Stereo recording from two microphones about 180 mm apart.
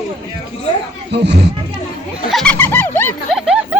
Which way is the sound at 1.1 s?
70° right (ahead or behind).